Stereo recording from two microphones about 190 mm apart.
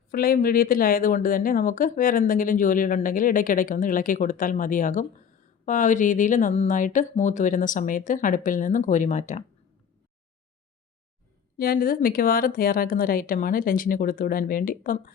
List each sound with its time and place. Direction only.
0.1 s speech: 50° left (ahead or behind)
11.5 s speech: 50° left (ahead or behind)